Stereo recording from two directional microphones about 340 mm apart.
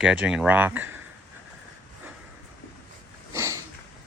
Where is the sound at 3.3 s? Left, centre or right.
Centre.